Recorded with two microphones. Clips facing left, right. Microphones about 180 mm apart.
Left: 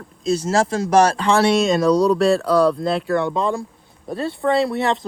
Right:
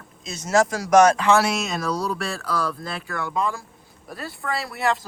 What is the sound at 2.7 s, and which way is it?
Speech, 25° left (ahead or behind).